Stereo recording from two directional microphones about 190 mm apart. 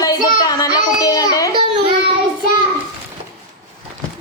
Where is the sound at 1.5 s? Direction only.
30° right (ahead or behind).